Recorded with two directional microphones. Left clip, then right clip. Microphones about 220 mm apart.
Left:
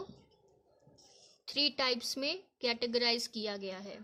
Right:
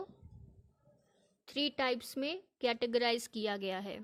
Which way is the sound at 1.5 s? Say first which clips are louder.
Left 2 dB; 25° right (ahead or behind).